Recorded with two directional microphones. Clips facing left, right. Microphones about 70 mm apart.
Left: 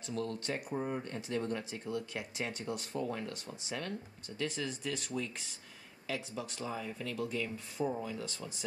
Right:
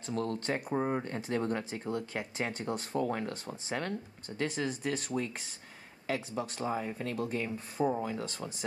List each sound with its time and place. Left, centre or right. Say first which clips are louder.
0.0 s speech: right 4 dB; right
3.0 s speech: right 6 dB; right
3.3 s speech: right 4 dB; right
7.8 s speech: right 5 dB; right